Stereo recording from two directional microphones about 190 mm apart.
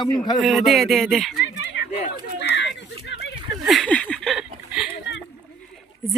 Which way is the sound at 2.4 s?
65° left (ahead or behind).